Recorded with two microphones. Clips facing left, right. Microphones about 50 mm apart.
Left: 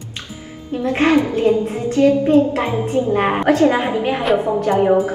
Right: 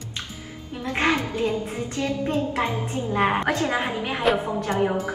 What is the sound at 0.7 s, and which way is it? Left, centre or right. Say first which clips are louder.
A woman's voice: left 8 dB; left.